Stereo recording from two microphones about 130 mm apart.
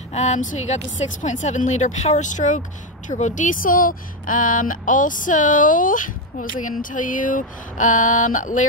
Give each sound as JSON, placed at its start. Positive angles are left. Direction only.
{"t": 0.1, "sound": "speech", "side_deg": 65}